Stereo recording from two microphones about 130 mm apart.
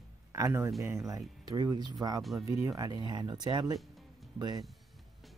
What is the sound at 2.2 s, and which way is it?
Speech, centre (ahead or behind).